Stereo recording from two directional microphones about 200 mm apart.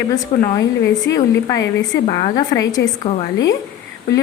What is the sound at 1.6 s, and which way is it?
Speech, 65° left (ahead or behind).